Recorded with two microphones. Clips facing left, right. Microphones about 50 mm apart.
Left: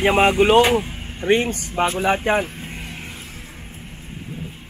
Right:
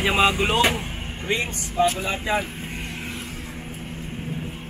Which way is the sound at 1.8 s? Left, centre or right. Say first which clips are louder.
Left 3 dB; left.